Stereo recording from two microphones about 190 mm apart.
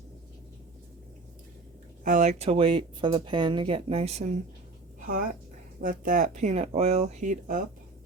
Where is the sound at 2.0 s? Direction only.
40° right (ahead or behind).